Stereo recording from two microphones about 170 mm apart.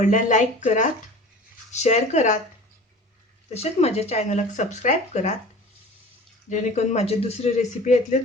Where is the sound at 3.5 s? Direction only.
35° left (ahead or behind).